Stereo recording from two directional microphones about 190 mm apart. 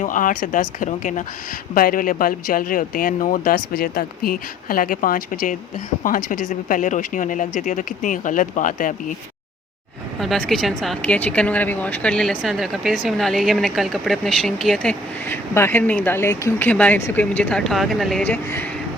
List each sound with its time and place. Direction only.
0.0 s a man's voice: 45° left (ahead or behind)
10.2 s a woman's voice: centre (ahead or behind)